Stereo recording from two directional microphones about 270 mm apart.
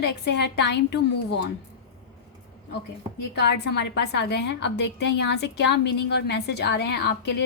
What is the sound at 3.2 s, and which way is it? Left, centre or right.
A woman's voice, left.